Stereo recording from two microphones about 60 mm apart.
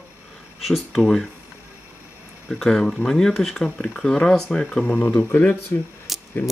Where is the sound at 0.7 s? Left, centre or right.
Centre.